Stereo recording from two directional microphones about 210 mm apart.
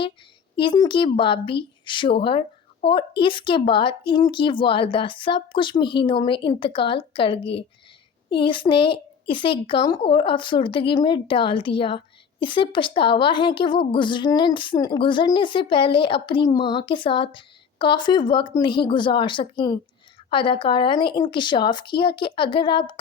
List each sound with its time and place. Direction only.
0.5 s speech: 25° left (ahead or behind)